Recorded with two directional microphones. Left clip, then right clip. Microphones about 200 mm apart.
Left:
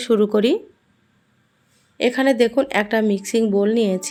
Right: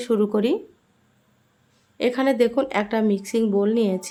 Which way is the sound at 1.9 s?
15° left (ahead or behind).